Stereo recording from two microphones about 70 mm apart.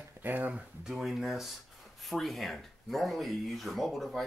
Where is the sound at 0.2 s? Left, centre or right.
Right.